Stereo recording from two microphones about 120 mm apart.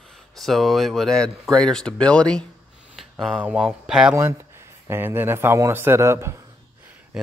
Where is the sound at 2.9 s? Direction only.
Centre (ahead or behind).